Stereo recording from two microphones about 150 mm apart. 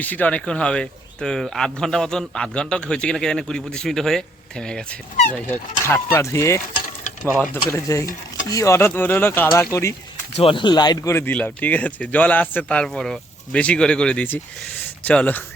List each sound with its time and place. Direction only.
0.0 s speech: 10° left (ahead or behind)
7.7 s speech: 20° left (ahead or behind)
10.3 s speech: 35° left (ahead or behind)
11.1 s speech: 10° left (ahead or behind)